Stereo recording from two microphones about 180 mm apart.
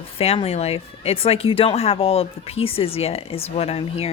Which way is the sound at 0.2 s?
35° left (ahead or behind).